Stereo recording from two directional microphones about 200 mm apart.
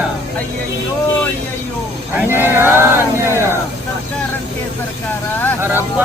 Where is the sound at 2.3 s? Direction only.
10° right (ahead or behind).